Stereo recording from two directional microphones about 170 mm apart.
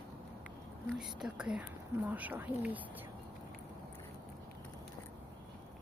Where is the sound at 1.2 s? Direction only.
5° right (ahead or behind).